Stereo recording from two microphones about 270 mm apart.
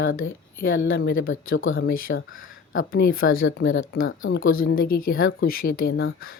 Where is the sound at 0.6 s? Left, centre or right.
Left.